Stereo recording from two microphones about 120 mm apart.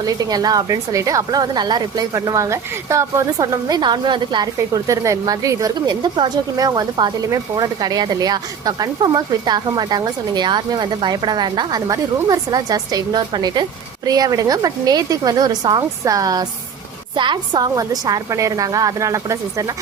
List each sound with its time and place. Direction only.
0.0 s speech: 30° right (ahead or behind)
4.5 s a woman's voice: 25° right (ahead or behind)